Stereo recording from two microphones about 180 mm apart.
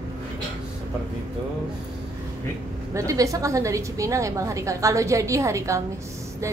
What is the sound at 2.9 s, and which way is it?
A woman's voice, 15° right (ahead or behind).